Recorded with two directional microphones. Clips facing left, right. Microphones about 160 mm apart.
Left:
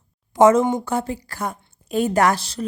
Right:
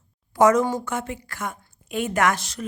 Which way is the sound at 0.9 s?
35° left (ahead or behind).